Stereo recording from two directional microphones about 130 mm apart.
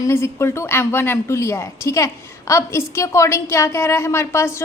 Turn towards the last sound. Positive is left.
turn(degrees=20)  # may be behind; listen again after turning